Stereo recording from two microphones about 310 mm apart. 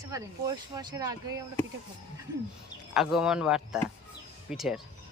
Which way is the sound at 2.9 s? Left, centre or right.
Centre.